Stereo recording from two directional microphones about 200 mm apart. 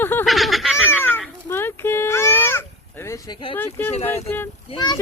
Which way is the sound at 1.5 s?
10° left (ahead or behind).